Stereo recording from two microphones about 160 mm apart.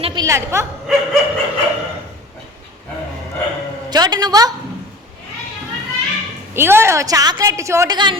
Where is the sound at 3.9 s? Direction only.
25° right (ahead or behind).